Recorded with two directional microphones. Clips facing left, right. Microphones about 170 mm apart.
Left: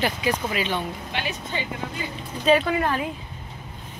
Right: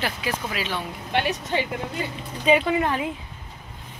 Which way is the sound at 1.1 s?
65° right (ahead or behind).